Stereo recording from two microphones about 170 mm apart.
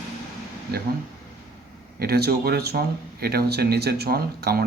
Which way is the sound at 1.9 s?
65° right (ahead or behind).